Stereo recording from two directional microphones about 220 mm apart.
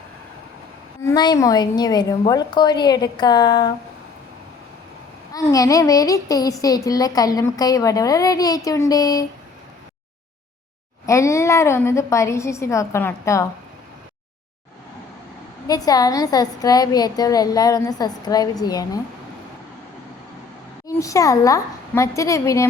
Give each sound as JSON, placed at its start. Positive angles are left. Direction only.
{"t": 1.0, "sound": "a woman's voice", "side_deg": 20}
{"t": 5.3, "sound": "a child's voice", "side_deg": 15}
{"t": 11.0, "sound": "a child's voice", "side_deg": 15}
{"t": 15.6, "sound": "a child's voice", "side_deg": 15}
{"t": 20.8, "sound": "a child's voice", "side_deg": 15}